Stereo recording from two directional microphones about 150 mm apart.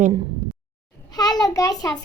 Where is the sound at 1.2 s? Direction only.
25° left (ahead or behind).